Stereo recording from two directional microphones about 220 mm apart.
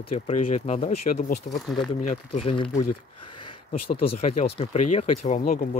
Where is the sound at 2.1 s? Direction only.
30° left (ahead or behind).